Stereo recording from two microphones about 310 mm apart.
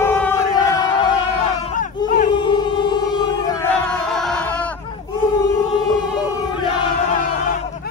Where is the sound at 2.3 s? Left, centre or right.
Centre.